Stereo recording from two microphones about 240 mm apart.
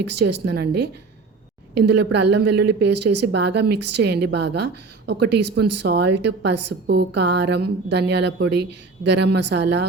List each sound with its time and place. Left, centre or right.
0.4 s a woman's voice: right